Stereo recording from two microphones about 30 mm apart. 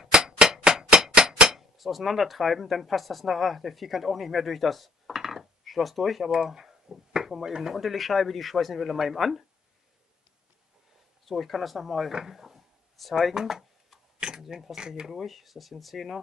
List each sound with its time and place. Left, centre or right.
0.1 s percussion: right
1.1 s hammer: right
1.5 s speech: centre
6.3 s speech: right
6.6 s a sound: centre
7.2 s speech: centre
11.2 s speech: centre
13.0 s speech: centre
13.3 s speech: centre
14.2 s a sound: right
14.8 s speech: right
15.0 s speech: centre